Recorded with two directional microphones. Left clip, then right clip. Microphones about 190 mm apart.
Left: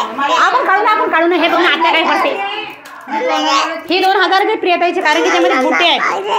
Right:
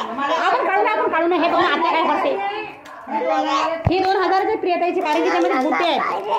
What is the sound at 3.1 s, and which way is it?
Speech, 50° left (ahead or behind).